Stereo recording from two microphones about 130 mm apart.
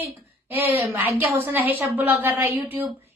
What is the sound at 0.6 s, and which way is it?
A woman's voice, 15° right (ahead or behind).